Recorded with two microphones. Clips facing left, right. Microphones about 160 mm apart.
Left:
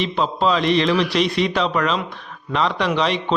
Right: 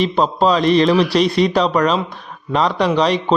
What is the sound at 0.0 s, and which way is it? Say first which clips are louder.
A man's voice: right 4 dB; 40° right (ahead or behind).